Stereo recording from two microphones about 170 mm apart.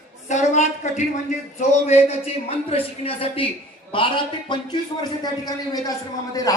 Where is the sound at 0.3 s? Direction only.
40° left (ahead or behind).